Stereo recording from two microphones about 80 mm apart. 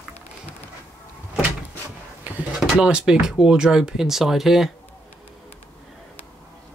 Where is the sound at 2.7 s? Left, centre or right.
Centre.